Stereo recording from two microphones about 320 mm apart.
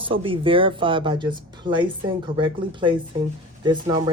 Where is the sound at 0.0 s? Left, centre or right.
Centre.